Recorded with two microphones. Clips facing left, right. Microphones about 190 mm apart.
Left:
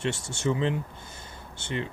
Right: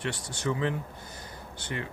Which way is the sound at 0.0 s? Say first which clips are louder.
Left 3 dB; 25° left (ahead or behind).